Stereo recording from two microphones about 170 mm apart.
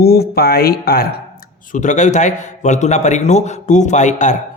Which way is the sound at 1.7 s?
45° left (ahead or behind).